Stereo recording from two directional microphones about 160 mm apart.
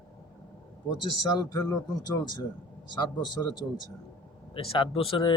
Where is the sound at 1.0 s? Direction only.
25° left (ahead or behind).